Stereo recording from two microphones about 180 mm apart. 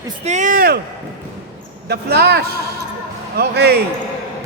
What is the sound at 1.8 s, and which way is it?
Speech, 65° right (ahead or behind).